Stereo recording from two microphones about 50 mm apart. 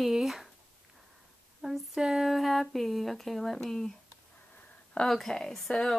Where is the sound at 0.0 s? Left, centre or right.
Centre.